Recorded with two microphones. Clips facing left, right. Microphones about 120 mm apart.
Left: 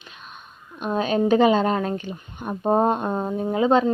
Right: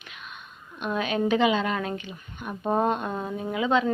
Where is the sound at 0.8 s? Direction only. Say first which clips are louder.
Left 4 dB; 35° left (ahead or behind).